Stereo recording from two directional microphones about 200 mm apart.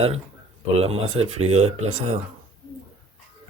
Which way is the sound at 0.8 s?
30° right (ahead or behind).